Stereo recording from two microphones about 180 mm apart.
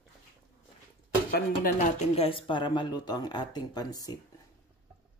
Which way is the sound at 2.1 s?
30° left (ahead or behind).